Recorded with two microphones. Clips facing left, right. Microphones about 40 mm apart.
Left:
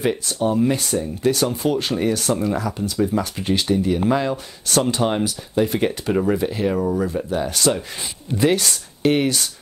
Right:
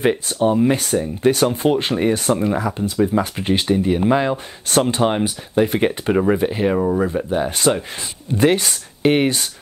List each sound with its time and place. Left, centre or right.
0.0 s speech: right